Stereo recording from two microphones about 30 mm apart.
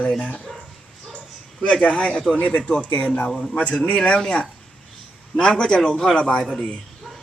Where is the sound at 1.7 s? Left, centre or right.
Left.